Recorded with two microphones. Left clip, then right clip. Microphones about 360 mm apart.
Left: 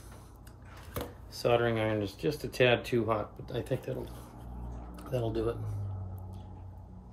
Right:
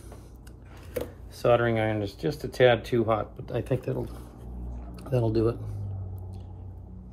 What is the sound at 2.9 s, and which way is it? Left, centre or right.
Speech, centre.